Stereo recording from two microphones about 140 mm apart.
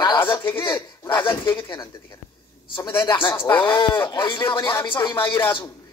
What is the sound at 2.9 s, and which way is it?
Speech, 35° left (ahead or behind).